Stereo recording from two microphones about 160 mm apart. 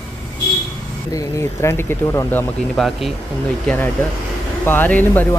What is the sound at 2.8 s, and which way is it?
Speech, centre (ahead or behind).